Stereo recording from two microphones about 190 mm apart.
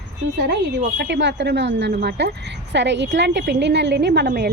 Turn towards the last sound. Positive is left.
turn(degrees=-60)  # may be behind; listen again after turning